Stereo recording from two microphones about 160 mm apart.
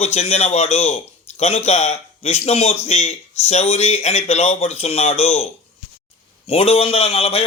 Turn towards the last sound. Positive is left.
turn(degrees=40)  # may be behind; listen again after turning